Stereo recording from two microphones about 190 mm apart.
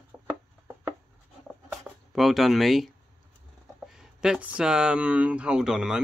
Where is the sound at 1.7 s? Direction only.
5° right (ahead or behind).